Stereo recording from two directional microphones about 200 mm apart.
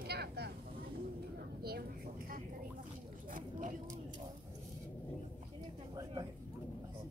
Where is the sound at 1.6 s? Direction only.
50° right (ahead or behind).